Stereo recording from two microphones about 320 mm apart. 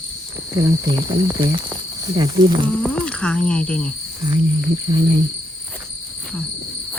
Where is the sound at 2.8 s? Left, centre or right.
Centre.